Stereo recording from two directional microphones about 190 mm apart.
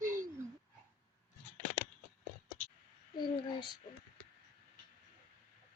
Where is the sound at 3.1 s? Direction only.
25° left (ahead or behind).